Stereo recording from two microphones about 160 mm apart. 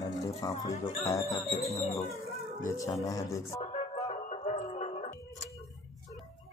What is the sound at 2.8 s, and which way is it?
Speech, 20° left (ahead or behind).